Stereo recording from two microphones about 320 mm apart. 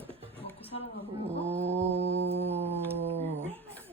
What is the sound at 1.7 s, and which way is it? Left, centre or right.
Mantra, centre.